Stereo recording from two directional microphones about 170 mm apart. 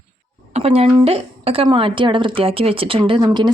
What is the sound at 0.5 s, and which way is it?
A woman's voice, 35° right (ahead or behind).